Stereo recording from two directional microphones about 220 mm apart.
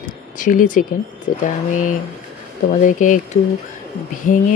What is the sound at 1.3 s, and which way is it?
Speech, 35° left (ahead or behind).